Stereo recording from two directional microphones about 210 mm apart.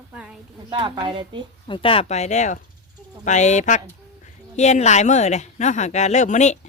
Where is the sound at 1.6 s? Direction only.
25° left (ahead or behind).